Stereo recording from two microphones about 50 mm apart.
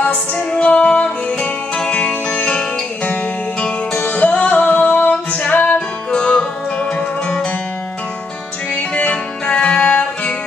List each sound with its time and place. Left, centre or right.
0.0 s music: left
4.0 s music: left
8.9 s music: left